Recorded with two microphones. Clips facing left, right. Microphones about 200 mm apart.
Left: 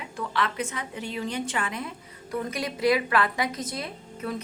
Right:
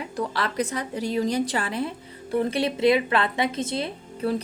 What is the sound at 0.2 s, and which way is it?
A woman's voice, 35° right (ahead or behind).